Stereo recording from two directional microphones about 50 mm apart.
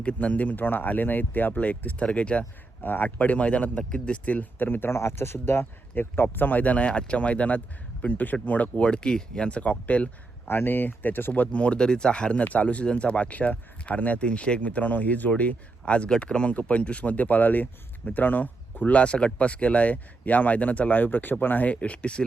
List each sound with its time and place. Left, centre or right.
0.0 s speech: left
1.5 s speech: left
2.8 s speech: left
4.9 s speech: left
5.9 s speech: left
8.8 s speech: centre
10.5 s speech: left
11.5 s speech: left
15.9 s speech: left